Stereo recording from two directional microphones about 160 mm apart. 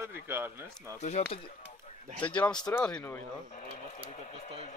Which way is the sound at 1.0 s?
45° left (ahead or behind).